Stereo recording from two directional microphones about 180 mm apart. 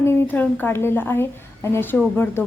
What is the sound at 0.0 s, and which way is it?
A woman's voice, 15° left (ahead or behind).